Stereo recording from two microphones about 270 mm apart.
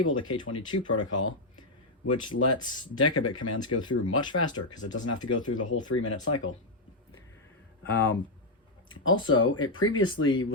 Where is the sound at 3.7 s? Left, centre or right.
Left.